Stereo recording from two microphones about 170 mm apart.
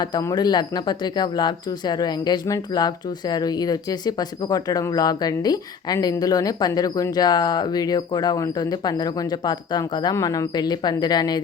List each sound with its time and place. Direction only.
0.0 s speech: 20° left (ahead or behind)